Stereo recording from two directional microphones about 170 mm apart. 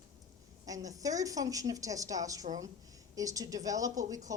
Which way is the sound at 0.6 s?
20° right (ahead or behind).